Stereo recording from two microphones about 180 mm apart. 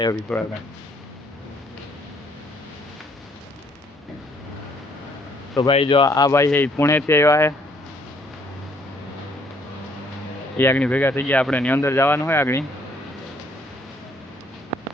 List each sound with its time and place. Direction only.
0.3 s speech: centre (ahead or behind)
5.5 s a man's voice: 30° left (ahead or behind)
10.6 s speech: 10° left (ahead or behind)